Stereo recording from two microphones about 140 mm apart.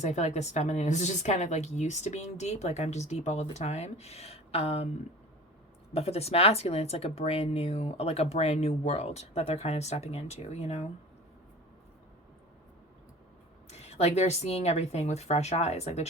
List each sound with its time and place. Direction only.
0.0 s a woman's voice: 55° left (ahead or behind)
5.9 s speech: 45° left (ahead or behind)
13.7 s speech: 50° left (ahead or behind)